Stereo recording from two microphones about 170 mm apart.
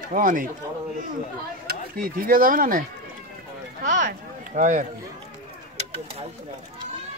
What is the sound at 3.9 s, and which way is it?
Speech, 50° right (ahead or behind).